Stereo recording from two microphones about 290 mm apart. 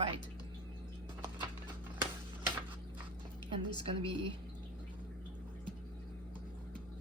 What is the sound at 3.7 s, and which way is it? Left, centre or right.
Speech, centre.